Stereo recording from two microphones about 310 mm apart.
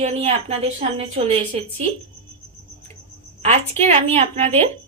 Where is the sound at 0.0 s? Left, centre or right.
Centre.